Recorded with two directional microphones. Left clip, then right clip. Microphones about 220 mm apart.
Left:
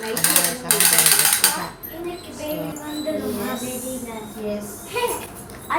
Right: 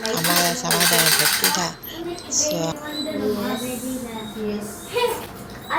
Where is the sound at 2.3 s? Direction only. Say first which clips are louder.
Right 8 dB; 20° right (ahead or behind).